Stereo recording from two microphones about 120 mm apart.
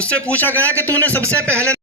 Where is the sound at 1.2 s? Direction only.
25° right (ahead or behind).